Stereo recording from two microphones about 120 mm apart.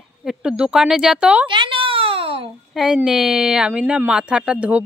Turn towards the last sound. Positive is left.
turn(degrees=-10)  # may be behind; listen again after turning